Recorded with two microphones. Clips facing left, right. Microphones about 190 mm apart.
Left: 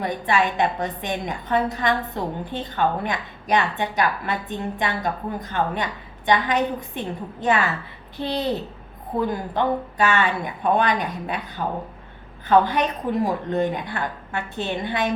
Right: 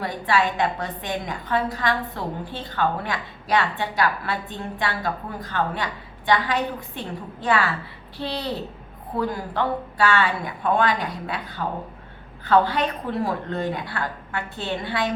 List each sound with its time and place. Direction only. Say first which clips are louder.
0.0 s a woman's voice: left 1 dB; 20° left (ahead or behind)